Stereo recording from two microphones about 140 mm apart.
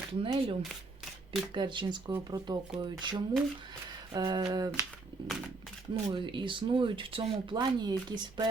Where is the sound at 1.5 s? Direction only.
35° right (ahead or behind).